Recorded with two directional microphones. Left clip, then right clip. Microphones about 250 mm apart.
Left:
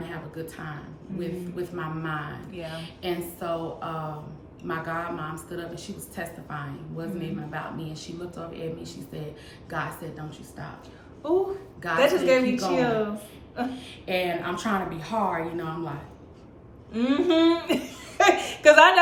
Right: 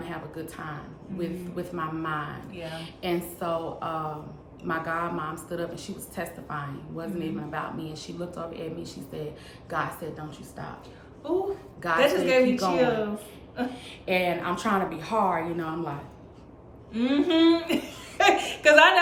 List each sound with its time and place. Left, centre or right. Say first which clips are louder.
0.0 s a man's voice: even; centre
11.2 s speech: left 3 dB; centre
13.7 s a man's voice: right 3 dB; centre
16.9 s speech: left 1 dB; centre